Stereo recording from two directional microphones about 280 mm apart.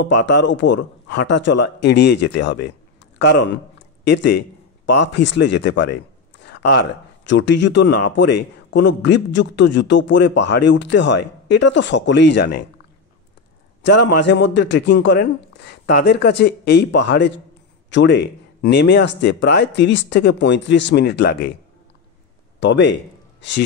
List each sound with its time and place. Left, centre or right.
0.0 s speech: left
13.8 s speech: left
22.6 s speech: left